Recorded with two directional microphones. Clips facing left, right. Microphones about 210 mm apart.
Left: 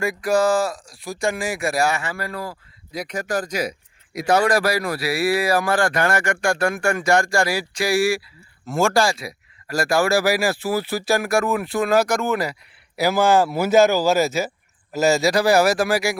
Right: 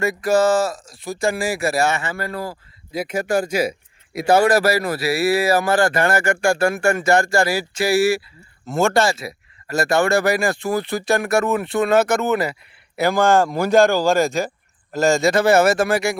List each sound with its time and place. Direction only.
0.0 s speech: centre (ahead or behind)
3.2 s speech: 25° right (ahead or behind)
4.5 s speech: 5° right (ahead or behind)